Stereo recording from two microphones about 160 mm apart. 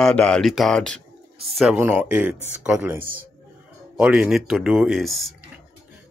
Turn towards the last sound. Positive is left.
turn(degrees=0)  # may be behind; listen again after turning